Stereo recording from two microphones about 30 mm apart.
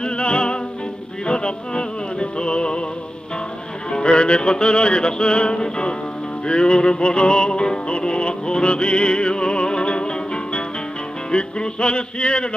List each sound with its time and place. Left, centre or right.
0.0 s music: left
3.9 s music: left